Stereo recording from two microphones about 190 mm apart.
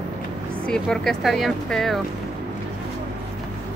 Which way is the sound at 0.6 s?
5° left (ahead or behind).